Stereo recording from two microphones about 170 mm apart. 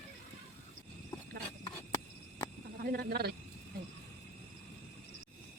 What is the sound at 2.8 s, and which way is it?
Speech, 65° right (ahead or behind).